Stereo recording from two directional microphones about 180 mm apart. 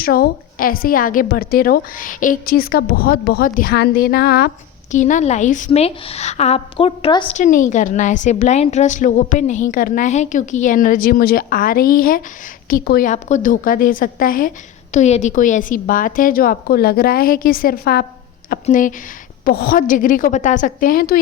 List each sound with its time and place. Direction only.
0.0 s a woman's voice: 55° left (ahead or behind)
4.9 s a woman's voice: 45° left (ahead or behind); by 7.3 s 30° left (ahead or behind)
7.3 s a woman's voice: 45° left (ahead or behind)
13.1 s a woman's voice: 40° left (ahead or behind)
14.9 s a woman's voice: 40° left (ahead or behind)